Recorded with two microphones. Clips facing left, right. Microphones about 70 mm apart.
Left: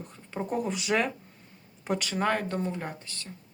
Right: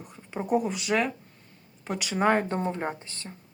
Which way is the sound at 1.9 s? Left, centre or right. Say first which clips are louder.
Right 4 dB; centre.